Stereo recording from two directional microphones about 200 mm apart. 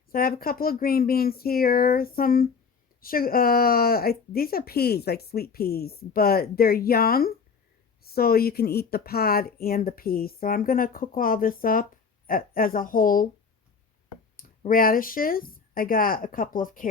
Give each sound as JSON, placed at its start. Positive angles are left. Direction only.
{"t": 0.1, "sound": "speech", "side_deg": 45}
{"t": 14.3, "sound": "speech", "side_deg": 45}